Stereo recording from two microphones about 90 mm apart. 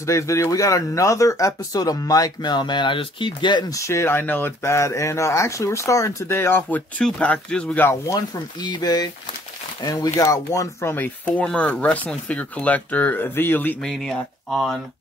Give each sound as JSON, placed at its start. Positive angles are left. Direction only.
{"t": 0.0, "sound": "speech", "side_deg": 35}
{"t": 3.7, "sound": "speech", "side_deg": 35}
{"t": 7.0, "sound": "speech", "side_deg": 10}
{"t": 7.9, "sound": "speech", "side_deg": 45}
{"t": 11.2, "sound": "speech", "side_deg": 15}
{"t": 13.8, "sound": "speech", "side_deg": 5}